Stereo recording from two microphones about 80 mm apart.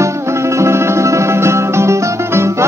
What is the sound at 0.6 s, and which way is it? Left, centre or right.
Music, right.